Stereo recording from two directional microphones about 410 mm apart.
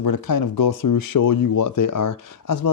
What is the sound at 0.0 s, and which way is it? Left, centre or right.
Speech, left.